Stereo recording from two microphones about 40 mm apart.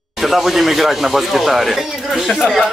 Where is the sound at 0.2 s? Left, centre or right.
Centre.